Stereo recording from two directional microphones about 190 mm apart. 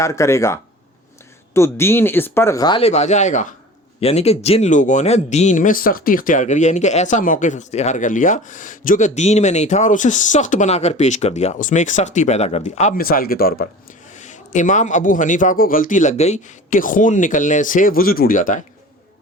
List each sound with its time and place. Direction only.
0.0 s speech: 15° left (ahead or behind); by 13.7 s 50° left (ahead or behind)
14.1 s a man's voice: 40° left (ahead or behind)